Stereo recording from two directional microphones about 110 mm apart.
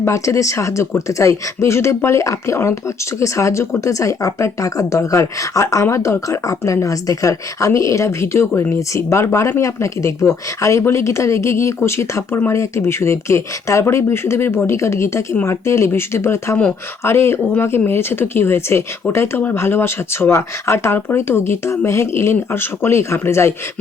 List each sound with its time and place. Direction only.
0.0 s speech: 30° left (ahead or behind)